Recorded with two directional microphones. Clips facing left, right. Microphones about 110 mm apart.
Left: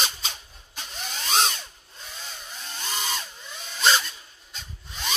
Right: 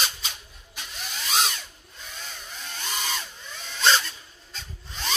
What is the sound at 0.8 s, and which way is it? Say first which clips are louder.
Vacuum cleaner: left 1 dB; 35° left (ahead or behind).